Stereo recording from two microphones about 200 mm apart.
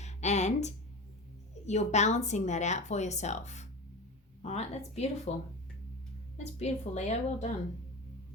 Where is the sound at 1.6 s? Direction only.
35° left (ahead or behind).